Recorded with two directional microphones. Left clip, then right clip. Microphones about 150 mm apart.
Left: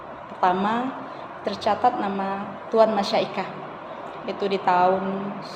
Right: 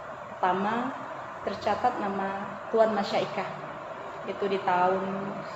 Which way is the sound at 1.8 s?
55° left (ahead or behind).